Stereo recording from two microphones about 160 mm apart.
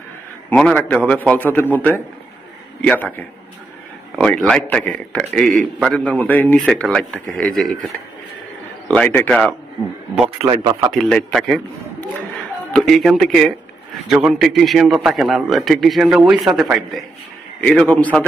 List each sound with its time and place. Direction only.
0.5 s a man's voice: 5° left (ahead or behind)
4.2 s a man's voice: 5° left (ahead or behind)
10.5 s speech: 25° right (ahead or behind)
11.0 s a man's voice: 5° left (ahead or behind)